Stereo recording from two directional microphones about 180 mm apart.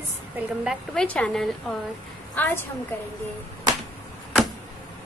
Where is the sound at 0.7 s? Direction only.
5° left (ahead or behind).